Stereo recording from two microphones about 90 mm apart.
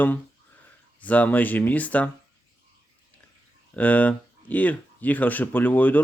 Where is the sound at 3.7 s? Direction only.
15° left (ahead or behind).